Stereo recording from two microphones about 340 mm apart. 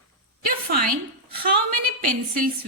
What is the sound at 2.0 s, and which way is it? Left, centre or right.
Speech, right.